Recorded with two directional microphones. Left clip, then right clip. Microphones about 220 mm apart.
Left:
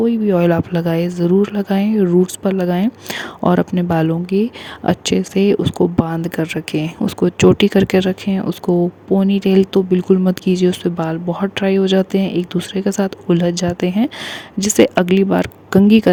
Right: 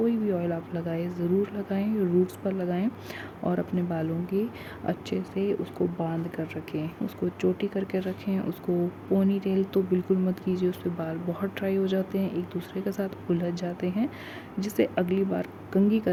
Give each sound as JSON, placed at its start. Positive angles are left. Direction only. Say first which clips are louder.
{"t": 0.0, "sound": "speech", "louder": "left 12 dB", "side_deg": 40}